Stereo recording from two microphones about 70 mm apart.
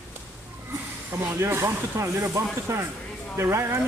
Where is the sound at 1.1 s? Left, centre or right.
Right.